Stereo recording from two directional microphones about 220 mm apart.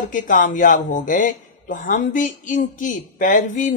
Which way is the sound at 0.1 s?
35° left (ahead or behind).